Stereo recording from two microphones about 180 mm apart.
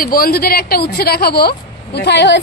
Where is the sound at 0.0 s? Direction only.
55° left (ahead or behind).